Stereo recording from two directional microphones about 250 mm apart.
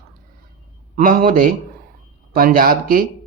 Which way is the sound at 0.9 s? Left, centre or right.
Right.